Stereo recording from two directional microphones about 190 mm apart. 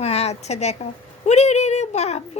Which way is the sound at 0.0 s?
35° left (ahead or behind).